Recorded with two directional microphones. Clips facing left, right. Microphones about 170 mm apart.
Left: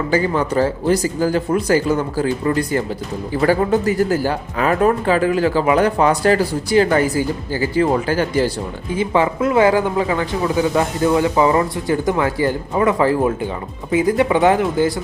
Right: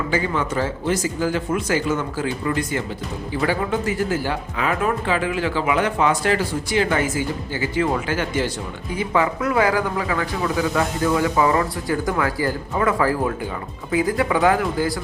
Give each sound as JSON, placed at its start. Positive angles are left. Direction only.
{"t": 0.1, "sound": "speech", "side_deg": 40}